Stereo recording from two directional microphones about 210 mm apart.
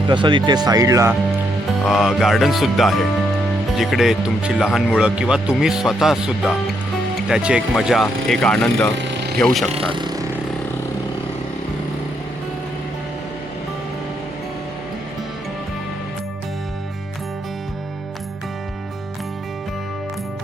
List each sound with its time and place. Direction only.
0.1 s speech: 20° right (ahead or behind)
1.9 s speech: centre (ahead or behind)
9.0 s vehicle: 55° right (ahead or behind)
9.4 s speech: centre (ahead or behind)
9.6 s speech: 25° right (ahead or behind)